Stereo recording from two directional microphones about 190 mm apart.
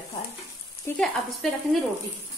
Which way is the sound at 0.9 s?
10° left (ahead or behind).